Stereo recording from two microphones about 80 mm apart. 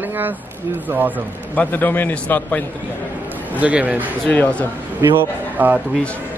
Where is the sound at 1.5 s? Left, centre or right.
Left.